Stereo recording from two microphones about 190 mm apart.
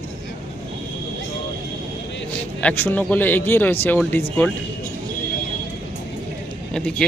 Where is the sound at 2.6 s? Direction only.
10° left (ahead or behind).